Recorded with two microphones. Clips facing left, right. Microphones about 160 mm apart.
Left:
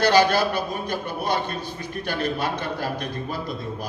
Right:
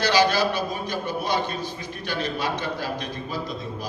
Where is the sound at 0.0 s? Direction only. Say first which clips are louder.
Left 2 dB; 55° left (ahead or behind).